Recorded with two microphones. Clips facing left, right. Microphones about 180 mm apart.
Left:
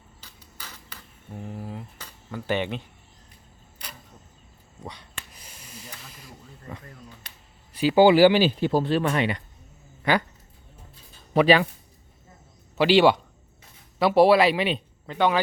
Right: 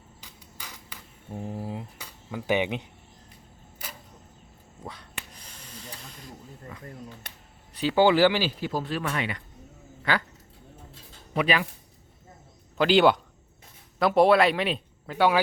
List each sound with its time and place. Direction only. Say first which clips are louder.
0.2 s a sound: even; 15° right (ahead or behind)
1.3 s speech: right 2 dB; 25° right (ahead or behind)
4.8 s a sound: even; centre (ahead or behind)
6.0 s ratchet: right 2 dB; 5° left (ahead or behind)
7.7 s speech: left 4 dB; 10° left (ahead or behind)
11.3 s speech: left 7 dB; 30° left (ahead or behind)
12.7 s speech: left 2 dB; 5° left (ahead or behind)